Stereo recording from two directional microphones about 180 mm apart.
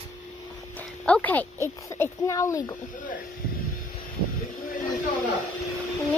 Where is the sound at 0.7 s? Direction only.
5° left (ahead or behind).